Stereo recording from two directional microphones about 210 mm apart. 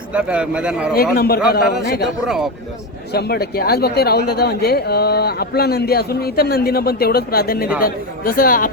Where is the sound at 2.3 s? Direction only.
Centre (ahead or behind).